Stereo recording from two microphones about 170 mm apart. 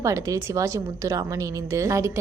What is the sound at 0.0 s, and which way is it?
A woman's voice, 20° right (ahead or behind).